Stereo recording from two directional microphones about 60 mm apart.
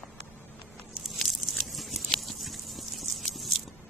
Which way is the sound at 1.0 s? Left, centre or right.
Centre.